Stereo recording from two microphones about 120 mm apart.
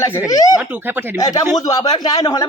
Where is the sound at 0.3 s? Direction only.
30° left (ahead or behind).